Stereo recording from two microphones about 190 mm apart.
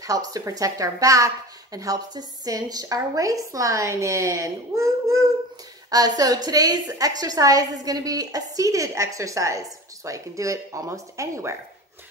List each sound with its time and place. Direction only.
0.0 s a woman's voice: 20° right (ahead or behind)